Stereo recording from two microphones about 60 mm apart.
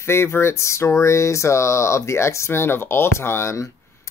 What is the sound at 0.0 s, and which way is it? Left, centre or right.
Speech, left.